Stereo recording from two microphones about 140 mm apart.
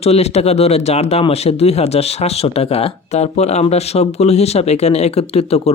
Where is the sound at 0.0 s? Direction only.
50° left (ahead or behind).